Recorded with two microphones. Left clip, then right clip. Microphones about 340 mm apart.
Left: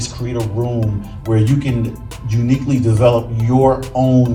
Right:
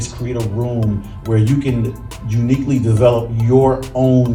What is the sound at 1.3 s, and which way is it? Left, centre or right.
Speech, centre.